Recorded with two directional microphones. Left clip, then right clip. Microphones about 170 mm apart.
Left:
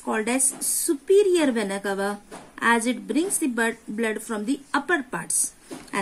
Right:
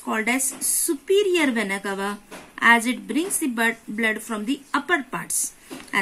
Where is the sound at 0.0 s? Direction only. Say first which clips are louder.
Right 1 dB; 15° right (ahead or behind).